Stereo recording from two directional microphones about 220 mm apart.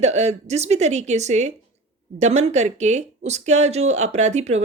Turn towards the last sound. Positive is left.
turn(degrees=-30)  # may be behind; listen again after turning